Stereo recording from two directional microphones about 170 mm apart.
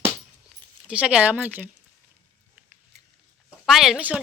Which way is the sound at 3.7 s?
Centre (ahead or behind).